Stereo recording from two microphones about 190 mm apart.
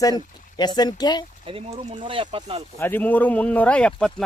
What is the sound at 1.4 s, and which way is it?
Speech, 30° right (ahead or behind).